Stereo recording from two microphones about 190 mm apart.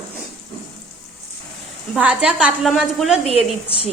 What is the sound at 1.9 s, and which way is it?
A woman's voice, 5° right (ahead or behind).